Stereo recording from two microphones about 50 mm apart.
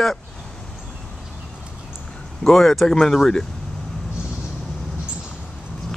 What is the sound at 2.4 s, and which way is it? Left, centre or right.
Speech, centre.